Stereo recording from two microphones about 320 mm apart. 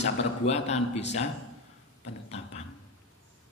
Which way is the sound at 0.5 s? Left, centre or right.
Centre.